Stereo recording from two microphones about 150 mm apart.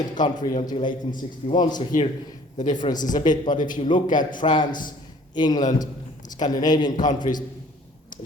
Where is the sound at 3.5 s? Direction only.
65° left (ahead or behind).